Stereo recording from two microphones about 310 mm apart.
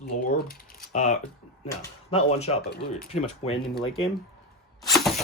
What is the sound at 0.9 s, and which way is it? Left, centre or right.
Speech, left.